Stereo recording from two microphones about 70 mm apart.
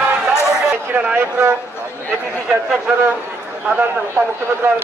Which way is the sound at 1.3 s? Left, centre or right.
Right.